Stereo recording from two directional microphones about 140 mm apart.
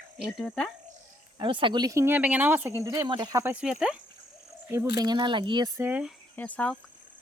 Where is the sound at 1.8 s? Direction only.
20° right (ahead or behind).